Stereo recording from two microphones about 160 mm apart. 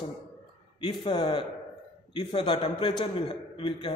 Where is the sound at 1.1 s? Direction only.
30° left (ahead or behind).